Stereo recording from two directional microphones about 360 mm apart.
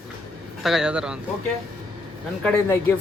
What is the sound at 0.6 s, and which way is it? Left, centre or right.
Speech, centre.